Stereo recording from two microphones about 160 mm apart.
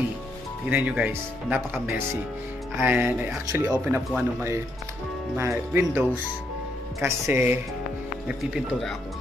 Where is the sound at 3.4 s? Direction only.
20° right (ahead or behind); by 9.0 s centre (ahead or behind).